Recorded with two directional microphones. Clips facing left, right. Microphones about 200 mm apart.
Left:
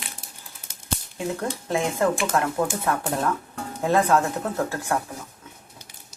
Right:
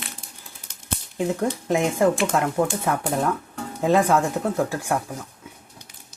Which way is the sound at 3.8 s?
15° right (ahead or behind).